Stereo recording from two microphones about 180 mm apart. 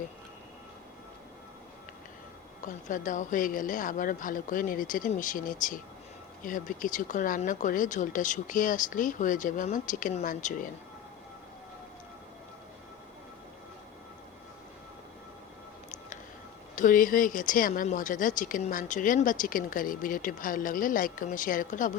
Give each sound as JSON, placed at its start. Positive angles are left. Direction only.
{"t": 2.6, "sound": "speech", "side_deg": 45}
{"t": 16.7, "sound": "speech", "side_deg": 45}